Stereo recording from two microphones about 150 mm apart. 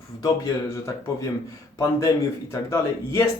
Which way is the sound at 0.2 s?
20° left (ahead or behind).